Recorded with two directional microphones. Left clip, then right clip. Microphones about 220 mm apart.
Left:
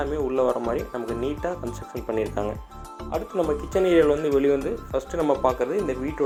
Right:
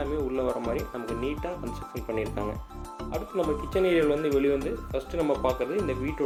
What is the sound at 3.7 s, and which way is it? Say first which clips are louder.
Speech: left 5 dB; 15° left (ahead or behind).